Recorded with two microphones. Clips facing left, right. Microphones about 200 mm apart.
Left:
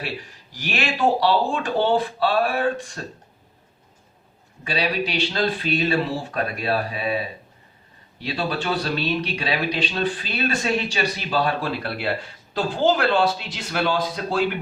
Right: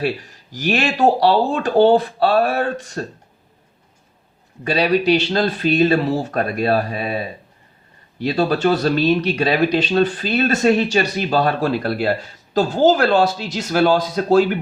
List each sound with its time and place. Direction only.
0.5 s speech: 40° right (ahead or behind)
4.6 s speech: 40° right (ahead or behind)
8.2 s speech: 45° right (ahead or behind)